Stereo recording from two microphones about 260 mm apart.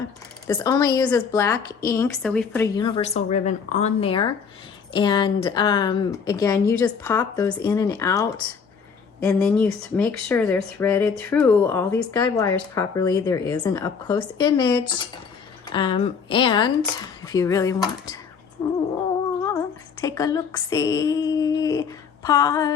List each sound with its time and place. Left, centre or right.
0.4 s speech: centre
19.5 s female singing: centre